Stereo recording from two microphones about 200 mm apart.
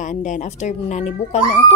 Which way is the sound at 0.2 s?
40° left (ahead or behind).